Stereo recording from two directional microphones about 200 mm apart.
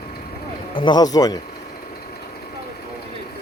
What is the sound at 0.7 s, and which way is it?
Speech, 20° left (ahead or behind).